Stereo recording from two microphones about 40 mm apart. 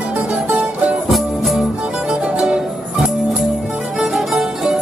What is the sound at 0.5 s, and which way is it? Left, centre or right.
Music, right.